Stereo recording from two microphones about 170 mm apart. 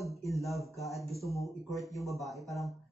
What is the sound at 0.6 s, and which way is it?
Speech, 20° left (ahead or behind).